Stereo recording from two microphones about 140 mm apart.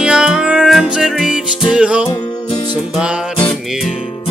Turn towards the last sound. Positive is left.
turn(degrees=5)  # may be behind; listen again after turning